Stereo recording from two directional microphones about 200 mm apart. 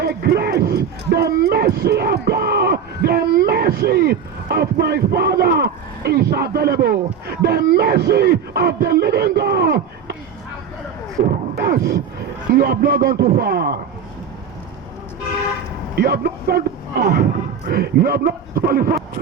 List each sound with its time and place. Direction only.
0.0 s speech: 50° right (ahead or behind)
11.3 s beatboxing: 50° right (ahead or behind)
12.5 s speech: 50° right (ahead or behind)
16.0 s speech: 50° right (ahead or behind)